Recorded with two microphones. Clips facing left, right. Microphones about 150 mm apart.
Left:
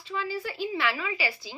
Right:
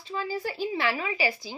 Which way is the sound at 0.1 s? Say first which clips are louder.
Right 1 dB; 40° right (ahead or behind).